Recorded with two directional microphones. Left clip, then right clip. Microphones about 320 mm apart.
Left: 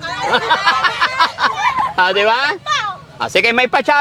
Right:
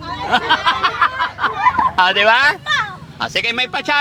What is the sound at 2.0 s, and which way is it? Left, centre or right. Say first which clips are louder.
Speech: even; left.